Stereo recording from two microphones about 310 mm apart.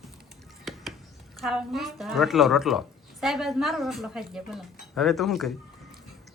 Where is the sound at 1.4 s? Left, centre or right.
Centre.